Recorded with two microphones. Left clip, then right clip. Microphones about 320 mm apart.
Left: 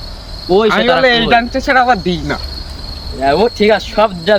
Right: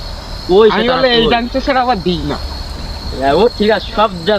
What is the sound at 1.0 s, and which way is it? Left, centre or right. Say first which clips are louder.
Speech: left 1 dB; centre.